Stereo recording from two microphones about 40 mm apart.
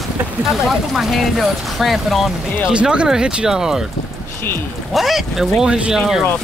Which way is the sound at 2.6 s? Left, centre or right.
Right.